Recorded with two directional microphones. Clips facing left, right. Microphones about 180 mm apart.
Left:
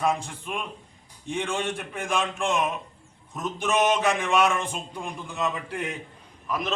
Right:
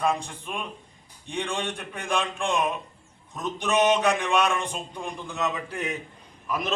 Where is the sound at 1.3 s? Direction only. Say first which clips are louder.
Left 2 dB; centre (ahead or behind).